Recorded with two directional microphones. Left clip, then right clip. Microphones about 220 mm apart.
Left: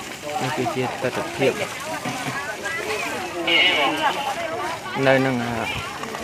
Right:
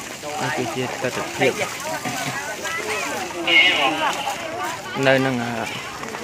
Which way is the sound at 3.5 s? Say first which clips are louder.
Right 2 dB; 15° right (ahead or behind).